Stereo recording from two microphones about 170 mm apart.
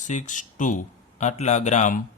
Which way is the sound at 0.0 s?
45° left (ahead or behind).